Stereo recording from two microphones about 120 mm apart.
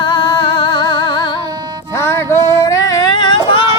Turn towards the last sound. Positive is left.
turn(degrees=45)  # may be behind; listen again after turning